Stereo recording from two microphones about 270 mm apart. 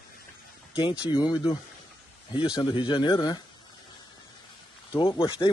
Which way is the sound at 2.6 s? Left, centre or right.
Centre.